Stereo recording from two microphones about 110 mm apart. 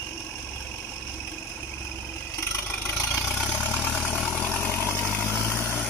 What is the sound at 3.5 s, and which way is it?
Vehicle, 15° left (ahead or behind).